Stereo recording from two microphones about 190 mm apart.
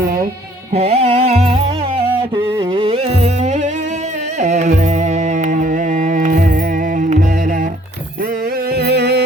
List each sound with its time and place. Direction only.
0.7 s music: 30° right (ahead or behind)
8.7 s music: 60° right (ahead or behind)